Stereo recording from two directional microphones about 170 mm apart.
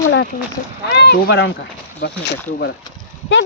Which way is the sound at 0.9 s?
70° left (ahead or behind).